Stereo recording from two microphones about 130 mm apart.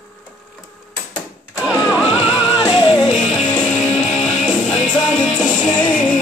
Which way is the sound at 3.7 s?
65° left (ahead or behind).